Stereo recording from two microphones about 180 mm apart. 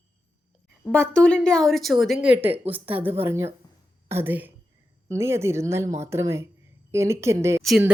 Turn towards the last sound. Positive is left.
turn(degrees=0)  # may be behind; listen again after turning